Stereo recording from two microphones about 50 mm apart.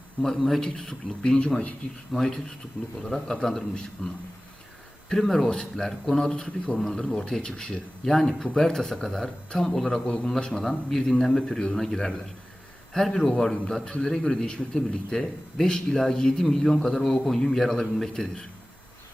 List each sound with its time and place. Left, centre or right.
0.2 s speech: centre
2.1 s a man's voice: centre
5.5 s speech: centre